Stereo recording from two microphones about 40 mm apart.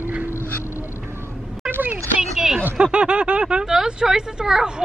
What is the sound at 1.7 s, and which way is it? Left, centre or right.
Speech, right.